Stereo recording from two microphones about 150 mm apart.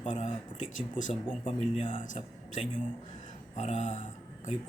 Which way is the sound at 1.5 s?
50° left (ahead or behind).